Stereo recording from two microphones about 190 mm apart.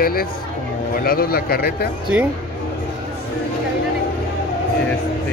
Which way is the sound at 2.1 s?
5° right (ahead or behind).